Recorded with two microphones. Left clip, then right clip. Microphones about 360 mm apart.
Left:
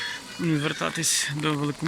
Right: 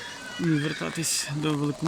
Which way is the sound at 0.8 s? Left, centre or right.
Centre.